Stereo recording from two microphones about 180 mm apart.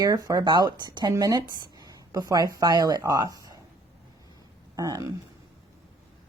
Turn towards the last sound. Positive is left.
turn(degrees=-20)  # may be behind; listen again after turning